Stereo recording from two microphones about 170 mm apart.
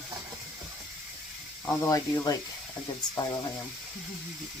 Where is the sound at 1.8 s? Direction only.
20° left (ahead or behind).